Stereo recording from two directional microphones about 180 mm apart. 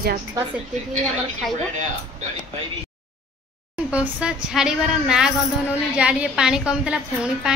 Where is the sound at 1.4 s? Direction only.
Centre (ahead or behind).